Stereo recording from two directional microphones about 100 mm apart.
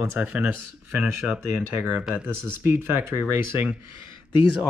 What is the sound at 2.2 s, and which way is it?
Speech, 25° right (ahead or behind).